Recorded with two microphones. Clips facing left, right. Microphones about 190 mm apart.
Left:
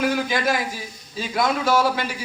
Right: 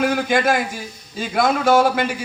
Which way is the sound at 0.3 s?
50° right (ahead or behind).